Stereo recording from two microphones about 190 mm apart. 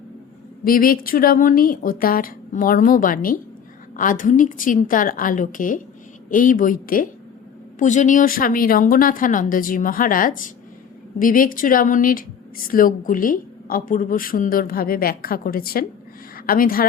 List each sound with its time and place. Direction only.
0.6 s speech: 50° left (ahead or behind)